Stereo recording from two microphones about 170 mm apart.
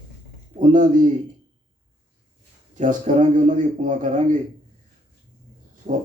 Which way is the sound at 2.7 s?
45° right (ahead or behind).